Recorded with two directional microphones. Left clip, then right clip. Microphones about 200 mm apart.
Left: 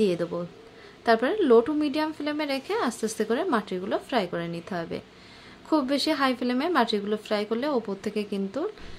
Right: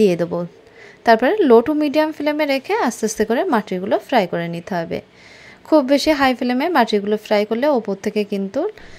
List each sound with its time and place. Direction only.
0.0 s a woman's voice: 35° right (ahead or behind)